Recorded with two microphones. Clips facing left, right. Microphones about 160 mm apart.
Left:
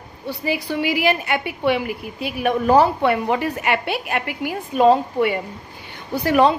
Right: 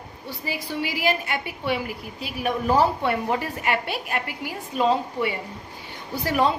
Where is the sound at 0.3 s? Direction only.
65° left (ahead or behind).